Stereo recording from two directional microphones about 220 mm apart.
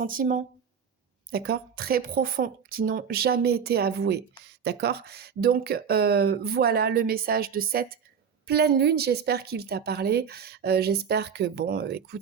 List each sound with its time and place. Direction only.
0.0 s speech: 40° right (ahead or behind)